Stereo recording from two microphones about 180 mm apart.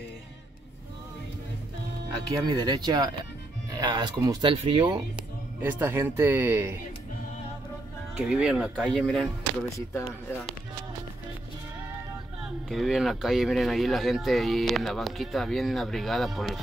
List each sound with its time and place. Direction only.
2.4 s speech: 25° right (ahead or behind)
5.1 s speech: 10° right (ahead or behind)
8.3 s speech: 5° right (ahead or behind)
9.7 s speech: 15° left (ahead or behind)
12.4 s speech: centre (ahead or behind)